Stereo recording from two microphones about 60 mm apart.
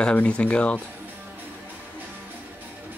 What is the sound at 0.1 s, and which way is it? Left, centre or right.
Speech, left.